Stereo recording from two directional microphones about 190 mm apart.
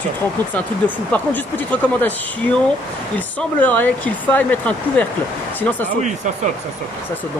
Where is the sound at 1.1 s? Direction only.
10° left (ahead or behind).